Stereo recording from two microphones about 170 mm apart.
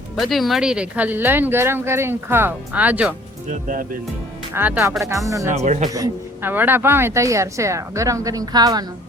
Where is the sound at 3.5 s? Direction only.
50° right (ahead or behind).